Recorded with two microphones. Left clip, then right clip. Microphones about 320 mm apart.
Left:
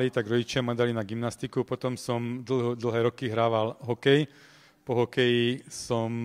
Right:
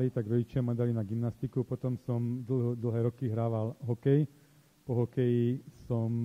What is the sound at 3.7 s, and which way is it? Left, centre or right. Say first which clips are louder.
Speech: left 7 dB; centre.